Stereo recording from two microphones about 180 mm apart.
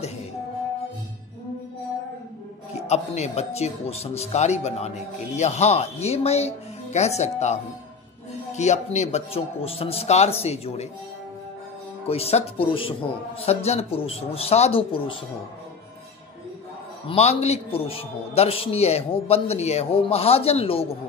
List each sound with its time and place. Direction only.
2.9 s a man's voice: 35° left (ahead or behind)
8.5 s a man's voice: 40° left (ahead or behind)
12.1 s a man's voice: 35° left (ahead or behind)
17.1 s a man's voice: 35° left (ahead or behind)